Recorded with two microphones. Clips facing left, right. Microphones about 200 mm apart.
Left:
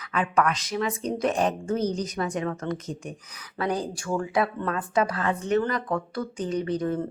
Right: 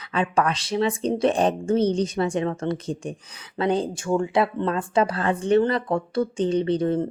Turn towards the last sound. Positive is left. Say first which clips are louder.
# right 5 dB
turn(degrees=-30)  # may be behind; listen again after turning